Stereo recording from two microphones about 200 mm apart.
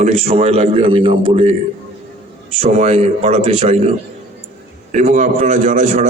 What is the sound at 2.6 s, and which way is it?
A man's voice, 35° right (ahead or behind).